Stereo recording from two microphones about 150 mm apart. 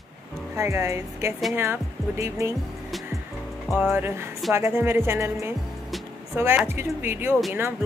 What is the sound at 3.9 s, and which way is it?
Speech, 15° right (ahead or behind).